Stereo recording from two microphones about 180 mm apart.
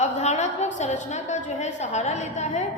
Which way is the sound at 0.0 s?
40° left (ahead or behind).